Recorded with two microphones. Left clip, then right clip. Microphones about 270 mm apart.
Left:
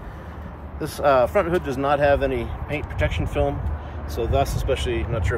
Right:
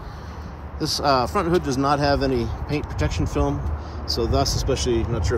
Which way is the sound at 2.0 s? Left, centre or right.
Right.